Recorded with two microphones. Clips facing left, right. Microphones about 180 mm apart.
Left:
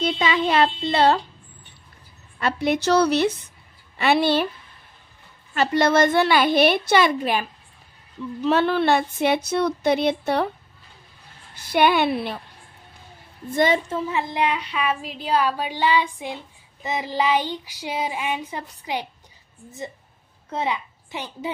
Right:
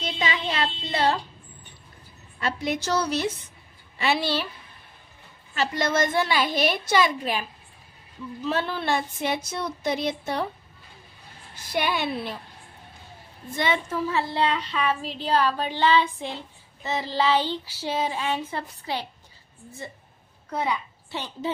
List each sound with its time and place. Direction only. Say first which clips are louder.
0.2 s speech: left 6 dB; 65° left (ahead or behind)
2.4 s speech: left 6 dB; 65° left (ahead or behind)
4.0 s a woman's voice: left 6 dB; 55° left (ahead or behind)
5.5 s a woman's voice: left 6 dB; 60° left (ahead or behind)
8.5 s speech: left 7 dB; 70° left (ahead or behind)
11.7 s a woman's voice: left 7 dB; 65° left (ahead or behind)
13.8 s a woman's voice: left 1 dB; 20° left (ahead or behind)
20.5 s a woman's voice: left 1 dB; 20° left (ahead or behind)